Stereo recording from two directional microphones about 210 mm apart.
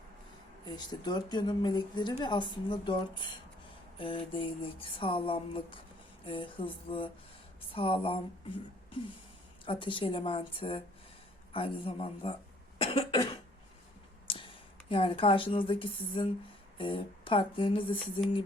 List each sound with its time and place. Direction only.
0.7 s a woman's voice: 20° left (ahead or behind)
9.6 s a woman's voice: 25° left (ahead or behind)
12.8 s cough: 25° left (ahead or behind)
14.3 s a woman's voice: 25° left (ahead or behind)